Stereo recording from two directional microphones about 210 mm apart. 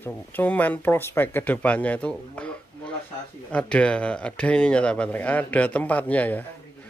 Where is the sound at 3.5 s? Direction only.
5° left (ahead or behind).